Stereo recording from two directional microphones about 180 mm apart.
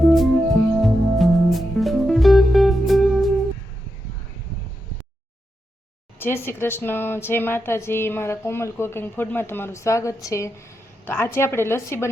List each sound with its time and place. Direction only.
0.0 s music: centre (ahead or behind)
6.1 s speech: 10° left (ahead or behind)